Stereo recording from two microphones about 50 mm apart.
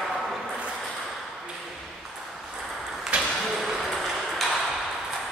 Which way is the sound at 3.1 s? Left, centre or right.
Right.